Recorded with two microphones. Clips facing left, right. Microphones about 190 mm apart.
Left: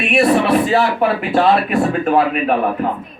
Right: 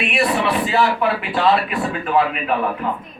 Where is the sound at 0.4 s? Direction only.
45° left (ahead or behind).